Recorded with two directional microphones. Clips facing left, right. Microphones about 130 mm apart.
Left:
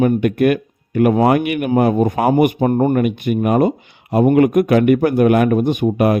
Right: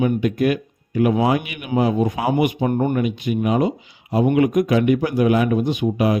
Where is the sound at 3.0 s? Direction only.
55° left (ahead or behind).